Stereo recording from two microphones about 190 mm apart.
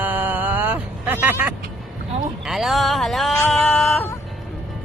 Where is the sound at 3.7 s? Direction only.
Centre (ahead or behind).